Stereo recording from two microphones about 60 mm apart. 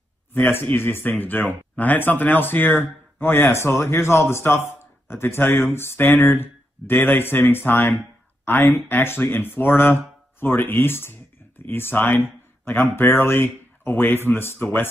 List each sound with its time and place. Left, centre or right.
0.3 s speech: left